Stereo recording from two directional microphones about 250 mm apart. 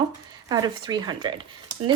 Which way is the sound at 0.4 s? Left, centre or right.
Centre.